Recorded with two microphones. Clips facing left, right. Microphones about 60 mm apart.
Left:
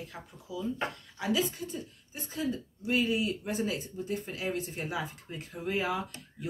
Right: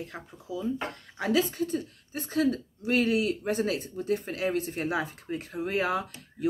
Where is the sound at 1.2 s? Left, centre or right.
Right.